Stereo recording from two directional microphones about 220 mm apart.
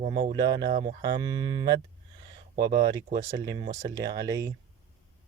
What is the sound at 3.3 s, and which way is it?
Speech, 15° right (ahead or behind).